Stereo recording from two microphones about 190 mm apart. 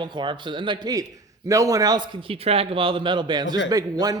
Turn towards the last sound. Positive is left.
turn(degrees=-20)  # may be behind; listen again after turning